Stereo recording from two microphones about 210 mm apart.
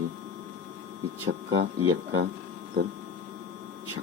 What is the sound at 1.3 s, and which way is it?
Speech, 75° right (ahead or behind).